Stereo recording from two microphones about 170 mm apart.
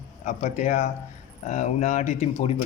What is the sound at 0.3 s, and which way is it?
Speech, 45° left (ahead or behind).